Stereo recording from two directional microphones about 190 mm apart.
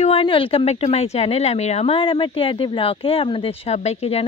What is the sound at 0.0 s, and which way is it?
Speech, 30° left (ahead or behind).